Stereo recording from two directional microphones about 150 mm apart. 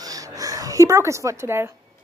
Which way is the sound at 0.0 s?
25° right (ahead or behind).